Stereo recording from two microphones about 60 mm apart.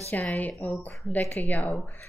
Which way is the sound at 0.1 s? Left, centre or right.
Left.